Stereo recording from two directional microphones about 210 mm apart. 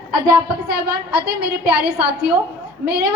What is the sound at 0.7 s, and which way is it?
Speech, 50° right (ahead or behind).